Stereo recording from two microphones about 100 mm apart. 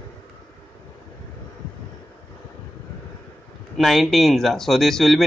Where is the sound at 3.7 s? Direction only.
Centre (ahead or behind).